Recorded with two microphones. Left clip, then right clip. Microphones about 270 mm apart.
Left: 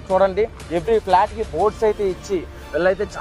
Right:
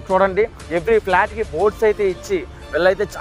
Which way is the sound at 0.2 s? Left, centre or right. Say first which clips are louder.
Right 1 dB; right.